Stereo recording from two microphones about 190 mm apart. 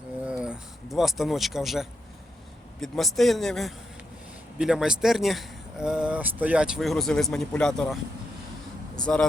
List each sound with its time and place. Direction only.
0.3 s a sound: 5° right (ahead or behind)
2.8 s speech: centre (ahead or behind)
9.1 s speech: 5° left (ahead or behind)